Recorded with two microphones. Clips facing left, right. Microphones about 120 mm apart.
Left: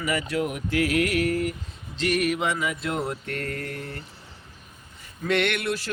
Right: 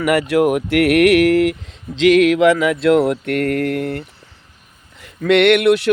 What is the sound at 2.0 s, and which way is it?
Mantra, 90° right.